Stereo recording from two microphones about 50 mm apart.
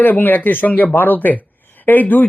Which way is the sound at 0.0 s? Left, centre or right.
Left.